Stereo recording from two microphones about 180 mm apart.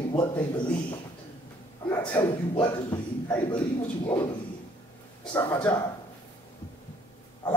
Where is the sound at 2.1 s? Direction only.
20° left (ahead or behind).